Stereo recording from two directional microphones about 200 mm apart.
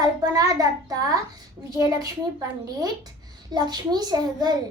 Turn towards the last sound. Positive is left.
turn(degrees=-20)  # may be behind; listen again after turning